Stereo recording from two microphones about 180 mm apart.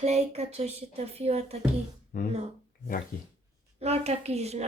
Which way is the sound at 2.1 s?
50° left (ahead or behind).